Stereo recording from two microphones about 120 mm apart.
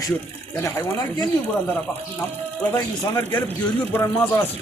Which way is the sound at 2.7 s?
20° left (ahead or behind).